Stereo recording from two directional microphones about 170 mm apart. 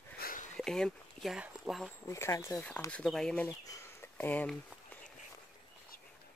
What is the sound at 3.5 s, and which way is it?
Speech, 20° left (ahead or behind).